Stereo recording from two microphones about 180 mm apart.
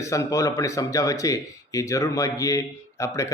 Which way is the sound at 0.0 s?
15° left (ahead or behind).